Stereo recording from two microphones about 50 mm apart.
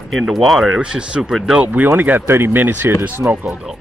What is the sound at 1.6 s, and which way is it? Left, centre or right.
Speech, right.